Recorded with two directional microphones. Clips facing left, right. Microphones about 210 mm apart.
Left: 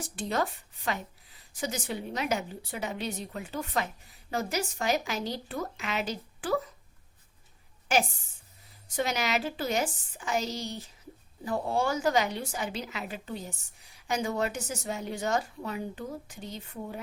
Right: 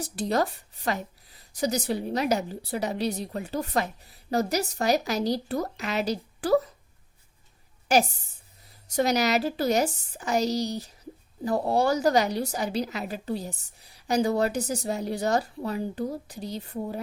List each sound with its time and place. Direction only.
0.0 s a woman's voice: 40° right (ahead or behind)
7.9 s a woman's voice: 40° right (ahead or behind)